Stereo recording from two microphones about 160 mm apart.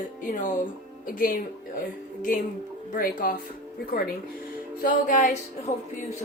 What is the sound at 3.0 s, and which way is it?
Speech, 60° left (ahead or behind).